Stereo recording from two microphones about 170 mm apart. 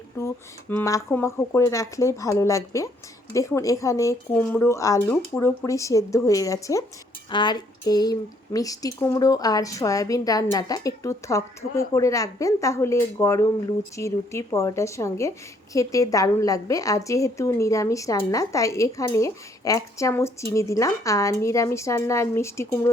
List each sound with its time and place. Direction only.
0.2 s a woman's voice: 15° left (ahead or behind)